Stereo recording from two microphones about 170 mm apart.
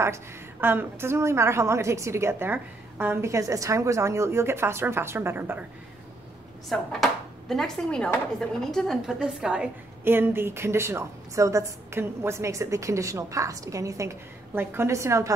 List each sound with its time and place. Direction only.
0.0 s speech: 15° right (ahead or behind)
6.7 s speech: centre (ahead or behind); by 15.3 s 15° right (ahead or behind)